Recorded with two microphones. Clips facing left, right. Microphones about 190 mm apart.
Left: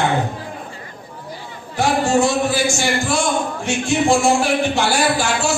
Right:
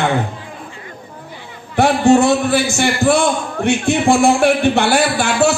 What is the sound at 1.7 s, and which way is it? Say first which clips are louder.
A man's voice: right 5 dB; 60° right (ahead or behind).